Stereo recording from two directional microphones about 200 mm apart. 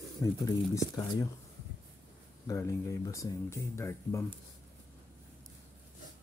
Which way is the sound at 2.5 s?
15° left (ahead or behind).